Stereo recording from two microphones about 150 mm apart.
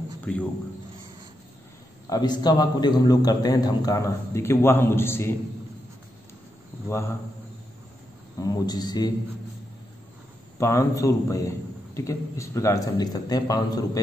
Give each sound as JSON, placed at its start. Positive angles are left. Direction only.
{"t": 0.2, "sound": "speech", "side_deg": 10}
{"t": 2.0, "sound": "a man's voice", "side_deg": 25}
{"t": 8.4, "sound": "a man's voice", "side_deg": 25}
{"t": 10.6, "sound": "a man's voice", "side_deg": 20}